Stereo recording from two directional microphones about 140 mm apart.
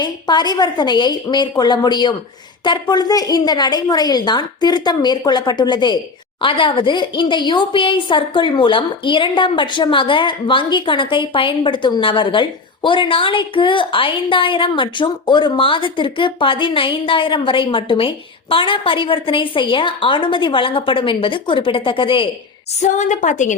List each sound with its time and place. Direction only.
0.0 s a woman's voice: 30° left (ahead or behind)
22.8 s a woman's voice: 60° left (ahead or behind)